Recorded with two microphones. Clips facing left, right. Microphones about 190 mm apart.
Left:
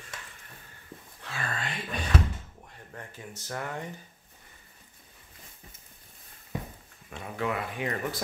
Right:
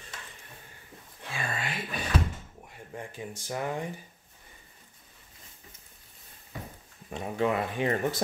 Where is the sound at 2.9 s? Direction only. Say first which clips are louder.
Right 5 dB; 15° right (ahead or behind).